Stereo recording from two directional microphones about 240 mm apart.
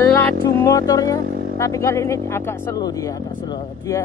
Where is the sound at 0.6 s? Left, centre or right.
Centre.